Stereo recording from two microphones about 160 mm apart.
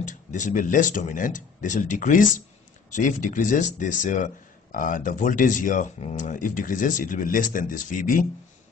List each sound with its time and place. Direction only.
0.0 s speech: 50° left (ahead or behind)